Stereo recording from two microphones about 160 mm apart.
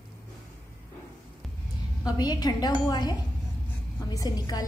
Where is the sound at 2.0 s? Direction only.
25° left (ahead or behind).